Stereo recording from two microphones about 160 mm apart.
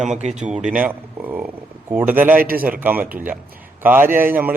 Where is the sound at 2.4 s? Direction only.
65° right (ahead or behind).